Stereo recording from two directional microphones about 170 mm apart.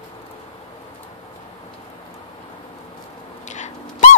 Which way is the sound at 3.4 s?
45° left (ahead or behind).